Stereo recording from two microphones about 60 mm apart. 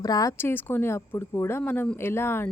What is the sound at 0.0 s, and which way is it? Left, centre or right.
Speech, left.